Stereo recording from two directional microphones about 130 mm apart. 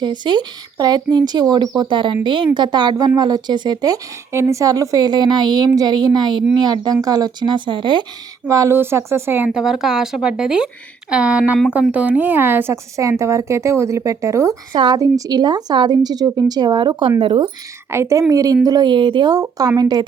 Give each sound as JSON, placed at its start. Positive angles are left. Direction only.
{"t": 0.0, "sound": "speech", "side_deg": -35}
{"t": 8.4, "sound": "a woman's voice", "side_deg": -25}
{"t": 9.6, "sound": "a woman's voice", "side_deg": -5}
{"t": 14.7, "sound": "speech", "side_deg": -35}
{"t": 17.9, "sound": "a woman's voice", "side_deg": -20}